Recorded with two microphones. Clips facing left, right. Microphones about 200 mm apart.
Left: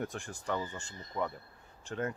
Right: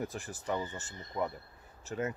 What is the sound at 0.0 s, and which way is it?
Speech, 5° right (ahead or behind).